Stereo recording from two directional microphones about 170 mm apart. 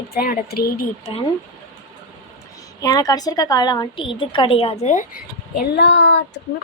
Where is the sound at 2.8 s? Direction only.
20° left (ahead or behind); by 6.1 s 90° left.